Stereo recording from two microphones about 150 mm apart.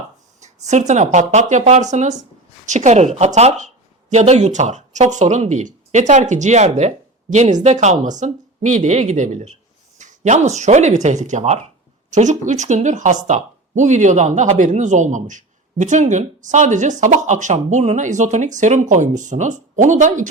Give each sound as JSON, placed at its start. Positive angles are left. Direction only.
{"t": 0.3, "sound": "speech", "side_deg": -50}